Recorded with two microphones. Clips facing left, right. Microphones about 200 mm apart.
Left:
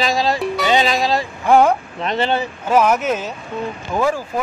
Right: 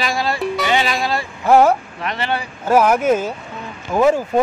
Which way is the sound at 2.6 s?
10° right (ahead or behind).